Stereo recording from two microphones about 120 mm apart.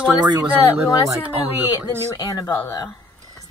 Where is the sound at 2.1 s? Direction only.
35° left (ahead or behind).